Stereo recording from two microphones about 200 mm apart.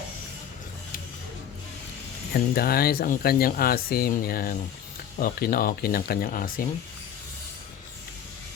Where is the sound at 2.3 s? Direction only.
50° left (ahead or behind).